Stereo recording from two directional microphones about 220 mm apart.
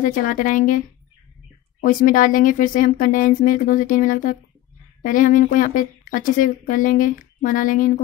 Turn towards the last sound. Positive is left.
turn(degrees=35)  # may be behind; listen again after turning